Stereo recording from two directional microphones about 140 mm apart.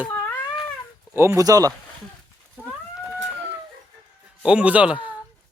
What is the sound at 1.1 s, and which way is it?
Speech, 20° right (ahead or behind).